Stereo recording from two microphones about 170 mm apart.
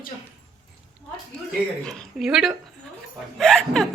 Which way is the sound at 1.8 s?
Centre (ahead or behind).